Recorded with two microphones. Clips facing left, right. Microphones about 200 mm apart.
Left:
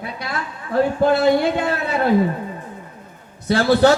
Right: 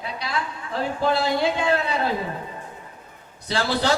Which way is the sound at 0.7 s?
55° left (ahead or behind).